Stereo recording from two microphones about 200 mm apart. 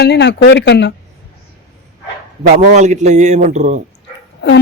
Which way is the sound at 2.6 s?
35° right (ahead or behind).